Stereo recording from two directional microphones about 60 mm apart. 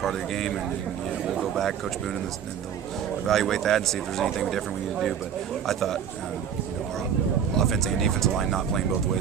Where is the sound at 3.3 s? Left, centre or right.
Centre.